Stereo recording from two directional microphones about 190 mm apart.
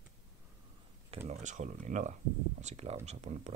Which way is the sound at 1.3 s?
40° right (ahead or behind).